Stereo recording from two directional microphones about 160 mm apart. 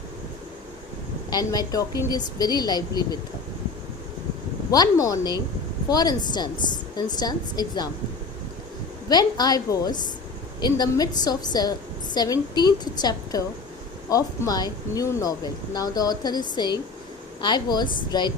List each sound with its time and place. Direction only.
1.3 s speech: 25° left (ahead or behind)
4.7 s speech: 20° left (ahead or behind)
9.0 s speech: 25° left (ahead or behind)